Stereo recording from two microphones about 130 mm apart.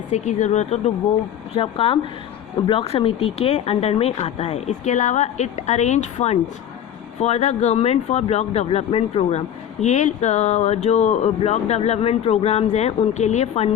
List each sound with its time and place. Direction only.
0.1 s speech: 65° left (ahead or behind)
1.5 s speech: 45° left (ahead or behind)
9.8 s speech: 65° left (ahead or behind)